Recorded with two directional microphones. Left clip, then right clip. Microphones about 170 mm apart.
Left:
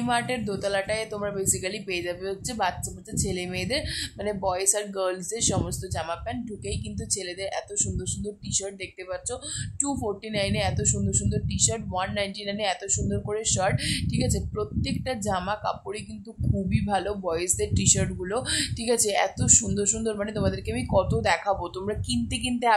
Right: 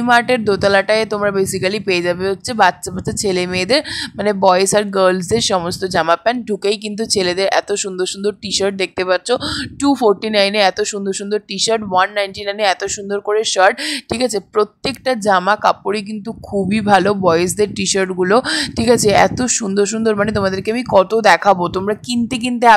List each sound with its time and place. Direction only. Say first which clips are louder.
0.0 s speech: right 14 dB; 45° right (ahead or behind)